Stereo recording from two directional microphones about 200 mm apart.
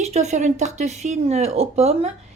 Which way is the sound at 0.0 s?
35° right (ahead or behind).